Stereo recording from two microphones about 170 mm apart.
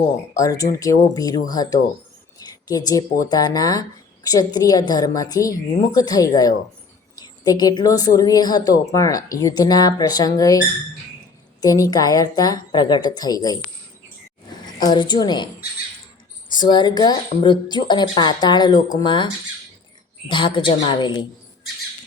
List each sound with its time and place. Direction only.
0.3 s speech: 20° left (ahead or behind)
14.8 s speech: 25° left (ahead or behind)
16.5 s speech: 25° left (ahead or behind)